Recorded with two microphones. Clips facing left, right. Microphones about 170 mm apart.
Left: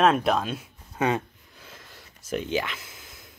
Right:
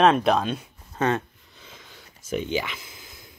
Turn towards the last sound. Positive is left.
turn(degrees=0)  # may be behind; listen again after turning